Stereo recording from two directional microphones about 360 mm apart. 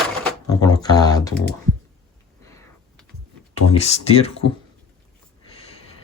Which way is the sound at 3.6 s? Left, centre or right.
Centre.